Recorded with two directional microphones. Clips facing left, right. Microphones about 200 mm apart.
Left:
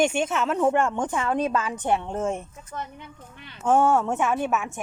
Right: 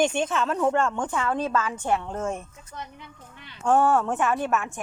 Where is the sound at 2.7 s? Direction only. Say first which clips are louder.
Left 4 dB; 50° left (ahead or behind).